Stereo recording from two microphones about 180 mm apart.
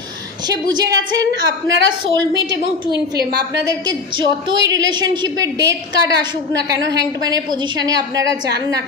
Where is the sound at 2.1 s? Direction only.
90° right.